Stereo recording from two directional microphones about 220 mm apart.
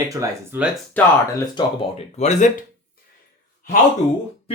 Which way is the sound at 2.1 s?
30° left (ahead or behind).